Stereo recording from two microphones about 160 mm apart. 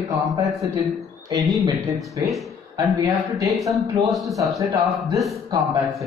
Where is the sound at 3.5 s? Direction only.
Centre (ahead or behind).